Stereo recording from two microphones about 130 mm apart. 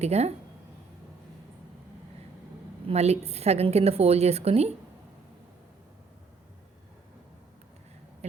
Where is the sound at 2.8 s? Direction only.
55° right (ahead or behind).